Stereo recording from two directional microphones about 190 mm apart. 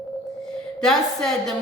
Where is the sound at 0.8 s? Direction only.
Centre (ahead or behind).